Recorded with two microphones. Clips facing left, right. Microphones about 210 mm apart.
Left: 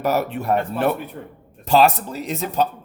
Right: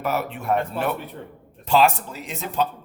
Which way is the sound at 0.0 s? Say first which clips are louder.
Left 5 dB; 40° left (ahead or behind).